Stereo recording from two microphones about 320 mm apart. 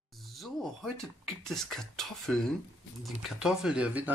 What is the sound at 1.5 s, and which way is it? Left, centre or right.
Speech, centre.